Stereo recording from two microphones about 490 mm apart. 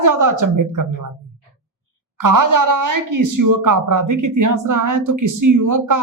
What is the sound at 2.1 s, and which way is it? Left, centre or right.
Speech, right.